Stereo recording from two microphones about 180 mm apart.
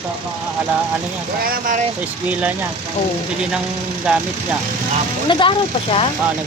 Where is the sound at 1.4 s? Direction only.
50° right (ahead or behind).